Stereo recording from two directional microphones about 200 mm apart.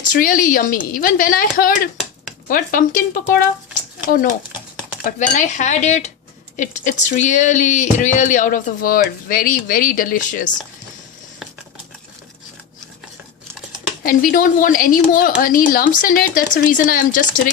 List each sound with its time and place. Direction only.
0.1 s speech: 45° left (ahead or behind)
5.0 s speech: 35° left (ahead or behind)
14.0 s speech: 45° left (ahead or behind)